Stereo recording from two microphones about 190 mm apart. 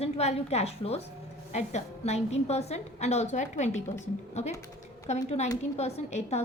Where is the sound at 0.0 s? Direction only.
35° left (ahead or behind).